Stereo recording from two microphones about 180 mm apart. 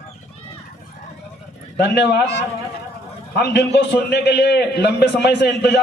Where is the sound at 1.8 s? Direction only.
70° left (ahead or behind).